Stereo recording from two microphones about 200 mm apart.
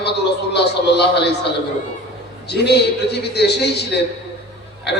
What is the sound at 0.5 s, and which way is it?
Speech, 55° left (ahead or behind).